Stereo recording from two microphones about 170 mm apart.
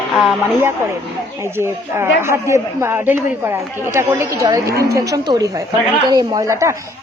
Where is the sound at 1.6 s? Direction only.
15° right (ahead or behind).